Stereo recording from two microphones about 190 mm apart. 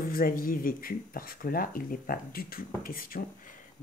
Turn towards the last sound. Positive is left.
turn(degrees=50)  # may be behind; listen again after turning